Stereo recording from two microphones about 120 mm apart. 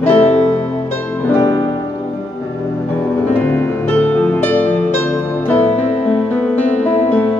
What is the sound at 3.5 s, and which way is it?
Music, 15° left (ahead or behind).